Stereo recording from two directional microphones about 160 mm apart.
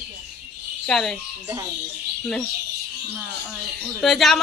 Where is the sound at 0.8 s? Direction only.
Centre (ahead or behind).